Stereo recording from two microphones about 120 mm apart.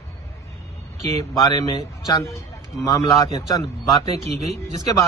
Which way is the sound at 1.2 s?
30° left (ahead or behind).